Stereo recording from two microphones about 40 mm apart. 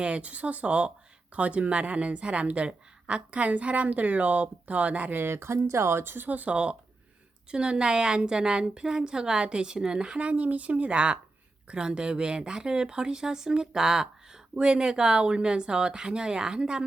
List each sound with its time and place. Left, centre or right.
0.0 s a woman's voice: right
5.1 s speech: right
6.1 s speech: right
6.5 s a woman's voice: right